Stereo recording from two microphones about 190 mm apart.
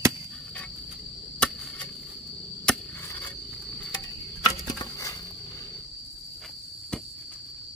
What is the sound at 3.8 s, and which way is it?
Cricket, 15° left (ahead or behind).